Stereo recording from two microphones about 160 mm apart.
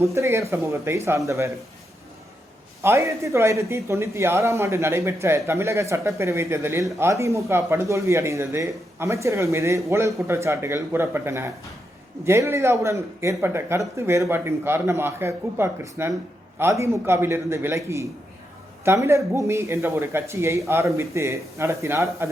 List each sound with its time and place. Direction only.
0.0 s speech: 20° right (ahead or behind)
2.8 s speech: 15° right (ahead or behind)